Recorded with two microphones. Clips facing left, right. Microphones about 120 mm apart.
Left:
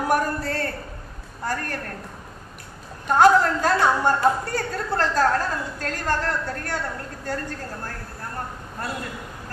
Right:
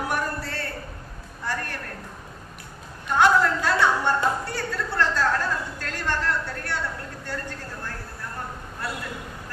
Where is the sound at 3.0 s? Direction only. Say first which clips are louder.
Left 3 dB; 40° left (ahead or behind).